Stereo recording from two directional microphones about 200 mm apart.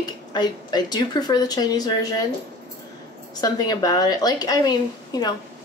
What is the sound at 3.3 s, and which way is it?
A woman's voice, 20° left (ahead or behind).